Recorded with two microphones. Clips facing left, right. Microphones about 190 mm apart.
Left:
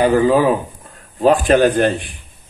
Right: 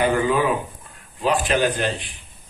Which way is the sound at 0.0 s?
35° left (ahead or behind).